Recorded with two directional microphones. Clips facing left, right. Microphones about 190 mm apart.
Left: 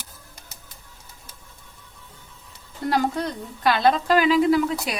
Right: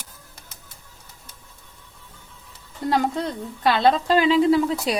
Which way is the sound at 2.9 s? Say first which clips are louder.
Right 1 dB; 25° right (ahead or behind).